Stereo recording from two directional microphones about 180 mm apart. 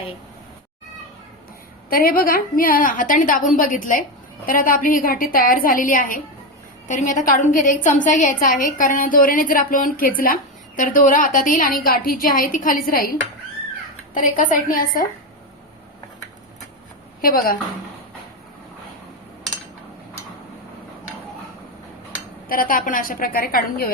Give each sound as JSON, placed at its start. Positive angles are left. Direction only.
{"t": 1.9, "sound": "a woman's voice", "side_deg": 50}
{"t": 17.2, "sound": "a woman's voice", "side_deg": 50}
{"t": 22.4, "sound": "a woman's voice", "side_deg": 50}